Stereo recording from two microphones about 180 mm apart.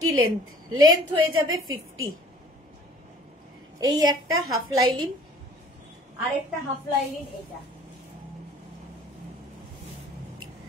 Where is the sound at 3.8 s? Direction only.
20° right (ahead or behind).